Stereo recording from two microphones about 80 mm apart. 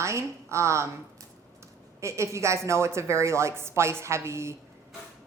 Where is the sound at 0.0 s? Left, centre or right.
Right.